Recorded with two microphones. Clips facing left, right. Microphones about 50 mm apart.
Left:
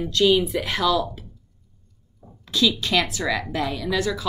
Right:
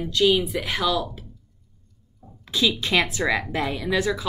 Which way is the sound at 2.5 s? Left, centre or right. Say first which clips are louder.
Even; right.